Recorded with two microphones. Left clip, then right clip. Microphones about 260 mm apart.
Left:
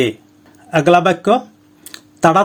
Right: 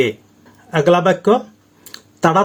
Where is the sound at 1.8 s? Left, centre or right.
Left.